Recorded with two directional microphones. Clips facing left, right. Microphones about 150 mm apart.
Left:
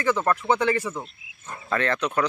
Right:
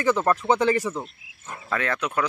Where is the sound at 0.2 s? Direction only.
20° right (ahead or behind).